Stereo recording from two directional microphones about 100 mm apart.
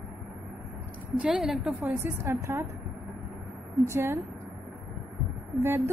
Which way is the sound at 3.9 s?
20° right (ahead or behind).